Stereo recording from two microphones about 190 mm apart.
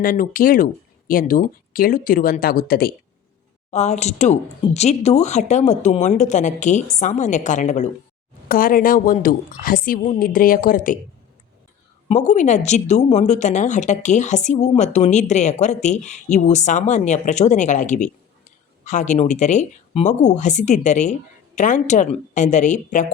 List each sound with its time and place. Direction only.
0.0 s speech: 45° left (ahead or behind)
3.7 s speech: 35° left (ahead or behind)
12.0 s speech: 40° left (ahead or behind)